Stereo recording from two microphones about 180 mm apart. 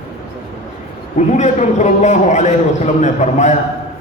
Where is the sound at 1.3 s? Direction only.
40° left (ahead or behind).